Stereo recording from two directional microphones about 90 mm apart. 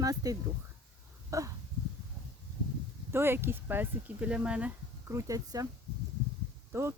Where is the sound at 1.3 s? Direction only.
40° right (ahead or behind).